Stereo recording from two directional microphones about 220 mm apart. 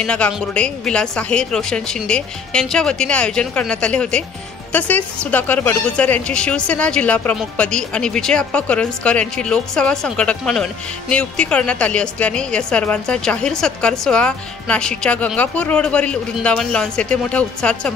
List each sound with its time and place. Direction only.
0.0 s speech: 5° left (ahead or behind)